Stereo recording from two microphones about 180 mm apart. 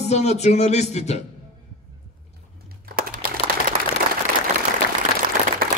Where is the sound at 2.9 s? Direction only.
50° right (ahead or behind).